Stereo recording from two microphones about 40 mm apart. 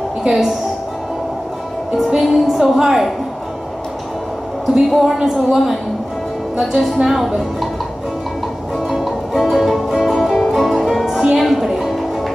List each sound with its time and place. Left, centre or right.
0.3 s speech: centre
2.0 s speech: centre
4.7 s speech: centre
8.8 s music: centre